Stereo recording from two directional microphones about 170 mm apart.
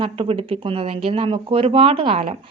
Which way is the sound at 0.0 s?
30° right (ahead or behind).